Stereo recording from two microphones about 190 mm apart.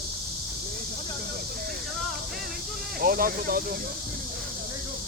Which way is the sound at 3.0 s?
50° right (ahead or behind).